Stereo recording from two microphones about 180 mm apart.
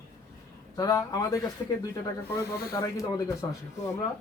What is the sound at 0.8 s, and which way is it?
Speech, 20° left (ahead or behind).